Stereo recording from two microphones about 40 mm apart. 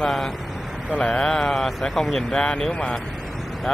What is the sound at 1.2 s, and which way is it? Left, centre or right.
Speech, centre.